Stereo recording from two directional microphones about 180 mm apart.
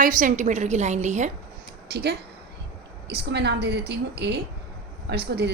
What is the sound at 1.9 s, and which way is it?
A woman's voice, 65° right (ahead or behind).